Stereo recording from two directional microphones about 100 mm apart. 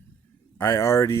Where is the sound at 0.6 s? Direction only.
25° left (ahead or behind).